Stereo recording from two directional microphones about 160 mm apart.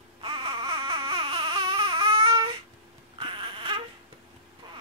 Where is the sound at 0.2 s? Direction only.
30° right (ahead or behind).